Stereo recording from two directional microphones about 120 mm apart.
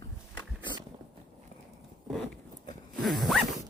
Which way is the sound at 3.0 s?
Centre (ahead or behind).